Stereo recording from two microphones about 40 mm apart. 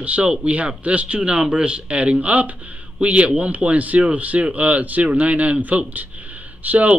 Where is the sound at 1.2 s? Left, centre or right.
Right.